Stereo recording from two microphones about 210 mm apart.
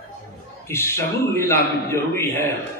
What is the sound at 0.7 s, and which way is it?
A man's voice, 10° left (ahead or behind).